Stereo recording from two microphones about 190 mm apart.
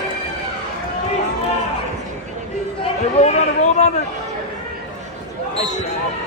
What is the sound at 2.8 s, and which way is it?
Chatter, 35° left (ahead or behind).